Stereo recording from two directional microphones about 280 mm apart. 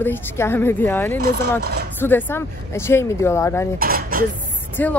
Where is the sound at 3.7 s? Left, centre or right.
Right.